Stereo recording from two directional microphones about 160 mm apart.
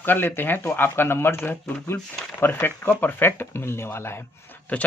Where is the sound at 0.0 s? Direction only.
15° left (ahead or behind).